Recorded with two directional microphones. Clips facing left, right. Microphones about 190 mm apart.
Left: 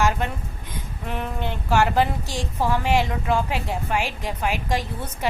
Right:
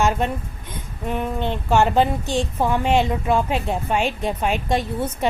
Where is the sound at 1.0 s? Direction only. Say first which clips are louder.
Right 5 dB; 20° right (ahead or behind).